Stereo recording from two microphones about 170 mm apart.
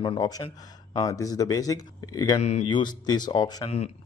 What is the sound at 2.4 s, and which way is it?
Speech, 40° left (ahead or behind).